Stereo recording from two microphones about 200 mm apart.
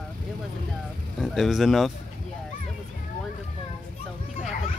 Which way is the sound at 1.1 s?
Centre (ahead or behind).